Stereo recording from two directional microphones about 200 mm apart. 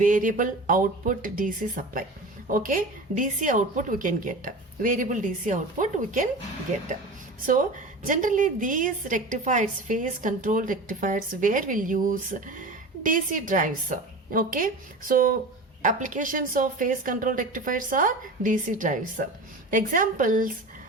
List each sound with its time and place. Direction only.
0.0 s a woman's voice: 40° right (ahead or behind)
7.4 s a woman's voice: 40° right (ahead or behind)